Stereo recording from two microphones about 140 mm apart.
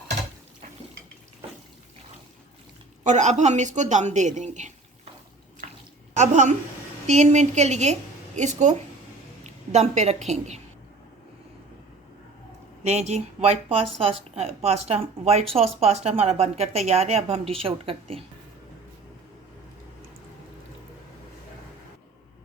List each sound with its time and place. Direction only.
3.0 s a woman's voice: 60° right (ahead or behind)
5.6 s bathtub: 75° right (ahead or behind)
6.1 s a woman's voice: 60° right (ahead or behind)
12.8 s a woman's voice: 50° right (ahead or behind)